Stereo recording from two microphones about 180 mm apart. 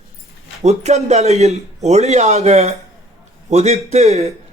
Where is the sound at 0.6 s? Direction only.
40° right (ahead or behind).